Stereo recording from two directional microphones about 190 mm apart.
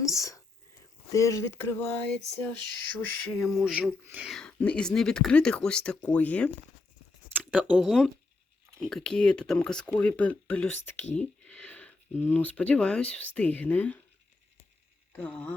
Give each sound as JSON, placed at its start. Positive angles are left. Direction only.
{"t": 0.0, "sound": "whispering", "side_deg": 15}
{"t": 1.1, "sound": "speech", "side_deg": 15}
{"t": 7.3, "sound": "speech", "side_deg": -5}
{"t": 15.1, "sound": "a sound", "side_deg": 5}